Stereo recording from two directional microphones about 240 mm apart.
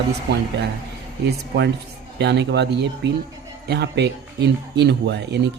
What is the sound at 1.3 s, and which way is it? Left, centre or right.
Speech, right.